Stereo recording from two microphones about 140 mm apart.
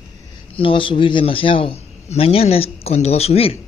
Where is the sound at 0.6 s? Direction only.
35° left (ahead or behind).